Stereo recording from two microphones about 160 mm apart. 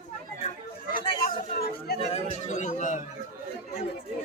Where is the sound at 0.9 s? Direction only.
70° left (ahead or behind).